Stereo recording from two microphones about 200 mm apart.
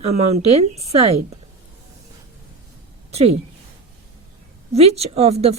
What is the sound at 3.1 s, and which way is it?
Speech, 30° right (ahead or behind).